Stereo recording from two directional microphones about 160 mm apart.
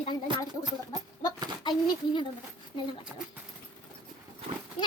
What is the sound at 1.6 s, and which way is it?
Speech, 30° left (ahead or behind).